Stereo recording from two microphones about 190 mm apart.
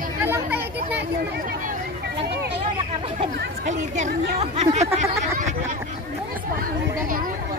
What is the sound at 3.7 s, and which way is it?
Speech, 40° right (ahead or behind).